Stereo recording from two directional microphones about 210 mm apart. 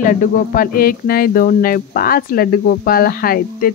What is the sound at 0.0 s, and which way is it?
Speech, 40° left (ahead or behind).